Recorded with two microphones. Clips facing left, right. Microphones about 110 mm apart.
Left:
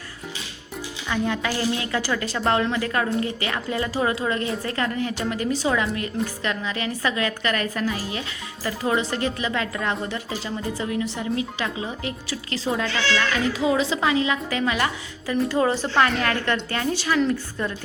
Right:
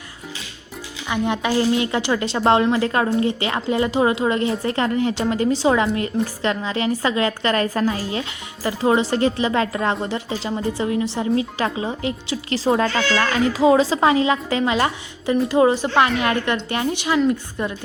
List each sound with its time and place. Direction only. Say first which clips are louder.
1.0 s a woman's voice: right 3 dB; 20° right (ahead or behind)
12.8 s speech: right 4 dB; 45° right (ahead or behind)
13.3 s a woman's voice: right 10 dB; 30° right (ahead or behind)